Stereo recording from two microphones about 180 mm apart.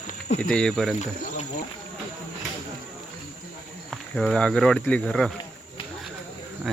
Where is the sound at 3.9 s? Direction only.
5° left (ahead or behind).